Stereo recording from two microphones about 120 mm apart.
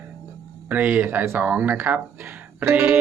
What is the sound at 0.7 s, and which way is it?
Speech, 15° right (ahead or behind).